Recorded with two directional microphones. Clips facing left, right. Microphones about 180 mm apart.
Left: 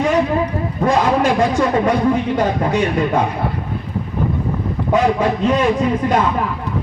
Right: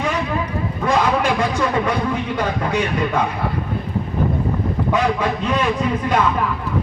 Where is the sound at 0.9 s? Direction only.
45° left (ahead or behind).